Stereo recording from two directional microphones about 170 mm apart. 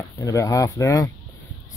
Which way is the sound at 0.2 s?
20° left (ahead or behind).